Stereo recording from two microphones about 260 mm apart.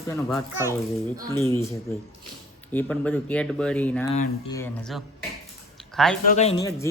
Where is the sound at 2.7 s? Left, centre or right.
Centre.